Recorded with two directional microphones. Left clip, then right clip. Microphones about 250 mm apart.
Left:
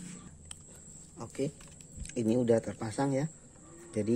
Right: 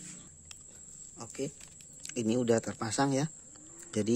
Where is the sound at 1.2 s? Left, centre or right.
Centre.